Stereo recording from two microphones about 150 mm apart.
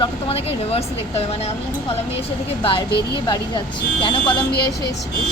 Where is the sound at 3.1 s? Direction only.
30° left (ahead or behind).